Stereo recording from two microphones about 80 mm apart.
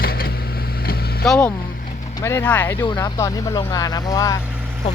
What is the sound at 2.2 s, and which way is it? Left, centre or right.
Speech, left.